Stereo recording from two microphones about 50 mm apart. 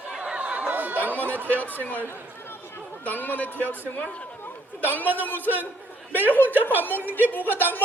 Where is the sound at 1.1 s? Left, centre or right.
Left.